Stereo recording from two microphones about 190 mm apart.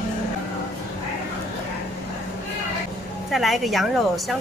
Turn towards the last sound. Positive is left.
turn(degrees=0)  # may be behind; listen again after turning